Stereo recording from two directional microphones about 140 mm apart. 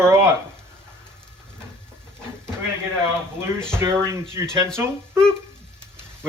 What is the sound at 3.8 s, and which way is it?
Speech, 25° right (ahead or behind).